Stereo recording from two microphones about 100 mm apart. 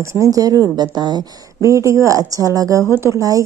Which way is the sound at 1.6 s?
30° right (ahead or behind).